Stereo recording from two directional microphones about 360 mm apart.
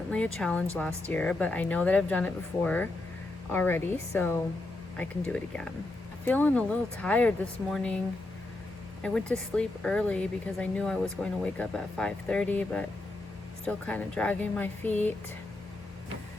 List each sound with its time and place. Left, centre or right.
0.3 s speech: centre
9.6 s speech: centre